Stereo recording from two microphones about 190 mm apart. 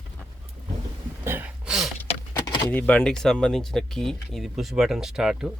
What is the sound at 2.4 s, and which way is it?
Door, 20° left (ahead or behind).